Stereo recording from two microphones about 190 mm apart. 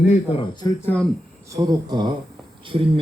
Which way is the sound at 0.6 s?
10° left (ahead or behind).